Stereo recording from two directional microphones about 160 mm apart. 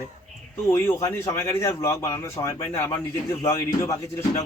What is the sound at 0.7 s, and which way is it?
A man's voice, 15° left (ahead or behind).